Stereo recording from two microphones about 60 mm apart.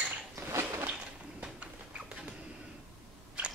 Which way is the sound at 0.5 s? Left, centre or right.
Right.